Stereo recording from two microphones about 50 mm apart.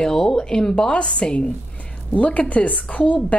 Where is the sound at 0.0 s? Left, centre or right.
Centre.